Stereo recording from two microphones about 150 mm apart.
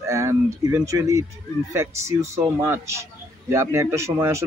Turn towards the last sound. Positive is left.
turn(degrees=-20)  # may be behind; listen again after turning